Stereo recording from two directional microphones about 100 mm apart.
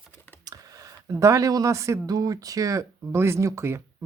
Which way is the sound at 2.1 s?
40° right (ahead or behind).